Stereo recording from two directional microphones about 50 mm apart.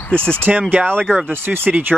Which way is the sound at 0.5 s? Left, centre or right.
Right.